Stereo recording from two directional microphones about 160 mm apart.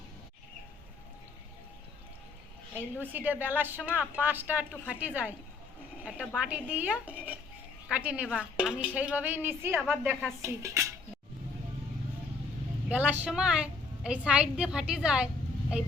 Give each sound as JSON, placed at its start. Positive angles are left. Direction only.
{"t": 3.0, "sound": "a woman's voice", "side_deg": -10}
{"t": 12.9, "sound": "a woman's voice", "side_deg": -10}